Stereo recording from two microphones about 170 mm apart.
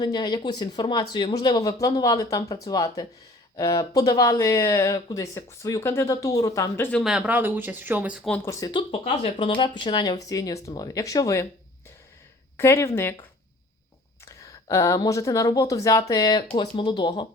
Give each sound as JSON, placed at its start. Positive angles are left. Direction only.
{"t": 0.0, "sound": "speech", "side_deg": 25}
{"t": 7.0, "sound": "speech", "side_deg": -5}
{"t": 8.4, "sound": "speech", "side_deg": 25}
{"t": 12.5, "sound": "speech", "side_deg": 15}
{"t": 14.3, "sound": "speech", "side_deg": 15}